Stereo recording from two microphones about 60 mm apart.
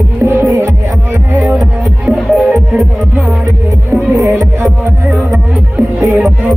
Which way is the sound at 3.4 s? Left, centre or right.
Right.